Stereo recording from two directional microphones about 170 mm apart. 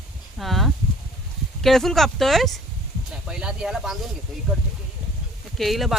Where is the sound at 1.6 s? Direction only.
Centre (ahead or behind).